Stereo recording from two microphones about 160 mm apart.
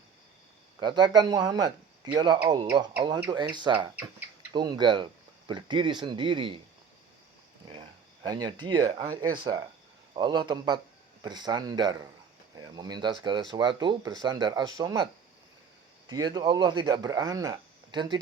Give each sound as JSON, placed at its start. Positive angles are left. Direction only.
{"t": 0.8, "sound": "speech", "side_deg": -30}
{"t": 7.7, "sound": "speech", "side_deg": -30}